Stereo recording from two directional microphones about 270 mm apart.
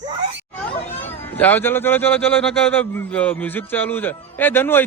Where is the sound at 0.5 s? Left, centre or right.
Centre.